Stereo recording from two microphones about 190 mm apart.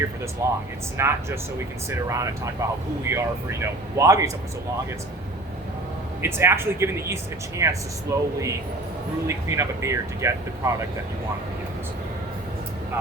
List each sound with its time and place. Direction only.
0.4 s speech: 15° right (ahead or behind)
6.2 s speech: 15° right (ahead or behind)